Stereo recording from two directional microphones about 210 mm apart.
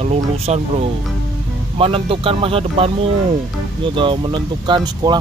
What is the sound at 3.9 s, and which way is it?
Speech, 25° right (ahead or behind).